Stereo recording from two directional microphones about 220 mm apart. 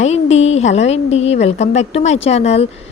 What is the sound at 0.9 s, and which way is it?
A woman's voice, 30° left (ahead or behind).